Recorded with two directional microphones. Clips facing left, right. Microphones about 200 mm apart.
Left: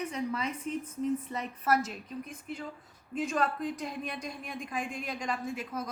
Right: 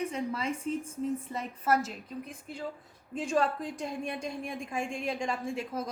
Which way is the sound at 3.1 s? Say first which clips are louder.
Right 2 dB; 30° right (ahead or behind).